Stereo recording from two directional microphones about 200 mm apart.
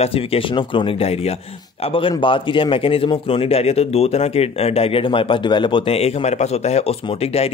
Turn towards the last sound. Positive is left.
turn(degrees=30)  # may be behind; listen again after turning